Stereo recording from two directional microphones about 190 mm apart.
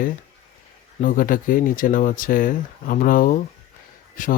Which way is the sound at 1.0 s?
45° left (ahead or behind).